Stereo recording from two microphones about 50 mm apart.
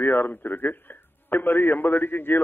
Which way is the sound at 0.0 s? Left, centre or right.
Left.